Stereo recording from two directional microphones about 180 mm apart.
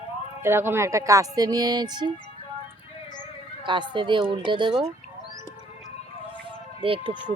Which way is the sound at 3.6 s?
25° right (ahead or behind).